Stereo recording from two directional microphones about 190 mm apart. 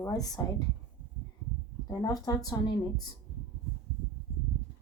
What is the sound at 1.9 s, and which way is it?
Speech, 20° left (ahead or behind).